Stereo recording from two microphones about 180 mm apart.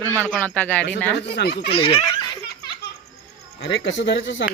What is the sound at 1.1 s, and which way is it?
Speech, 70° left (ahead or behind).